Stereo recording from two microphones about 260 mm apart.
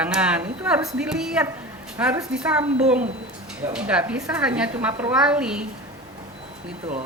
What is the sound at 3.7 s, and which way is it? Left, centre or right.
A woman's voice, centre.